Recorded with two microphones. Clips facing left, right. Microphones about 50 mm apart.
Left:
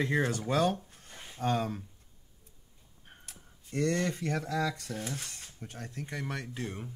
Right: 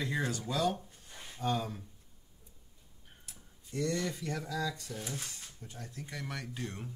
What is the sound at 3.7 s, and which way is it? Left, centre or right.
Speech, left.